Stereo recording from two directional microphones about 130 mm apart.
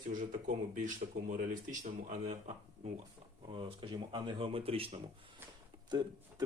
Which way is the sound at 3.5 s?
40° right (ahead or behind).